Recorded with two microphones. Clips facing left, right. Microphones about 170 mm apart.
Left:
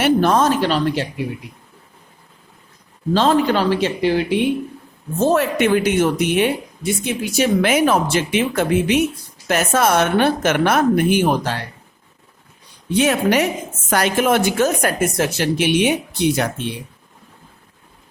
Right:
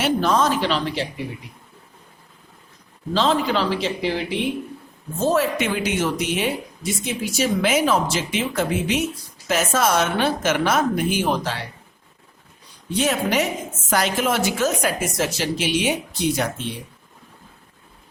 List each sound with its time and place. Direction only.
0.0 s a sound: 55° left (ahead or behind)
3.2 s speech: 50° left (ahead or behind)
13.0 s speech: 60° left (ahead or behind)